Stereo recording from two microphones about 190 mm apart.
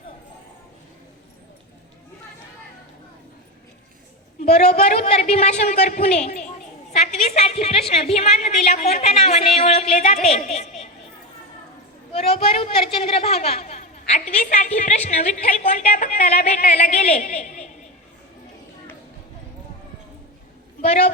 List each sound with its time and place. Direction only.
4.4 s a woman's voice: 35° left (ahead or behind)
12.1 s a woman's voice: 30° left (ahead or behind)